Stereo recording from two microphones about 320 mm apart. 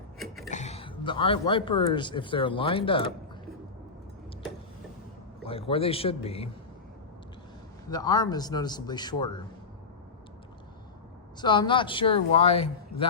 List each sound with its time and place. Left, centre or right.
0.5 s a man's voice: left
5.4 s speech: centre
7.9 s speech: centre
11.3 s speech: centre